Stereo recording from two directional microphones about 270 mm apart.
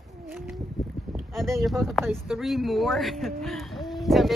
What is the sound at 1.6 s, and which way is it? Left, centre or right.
A man's voice, centre.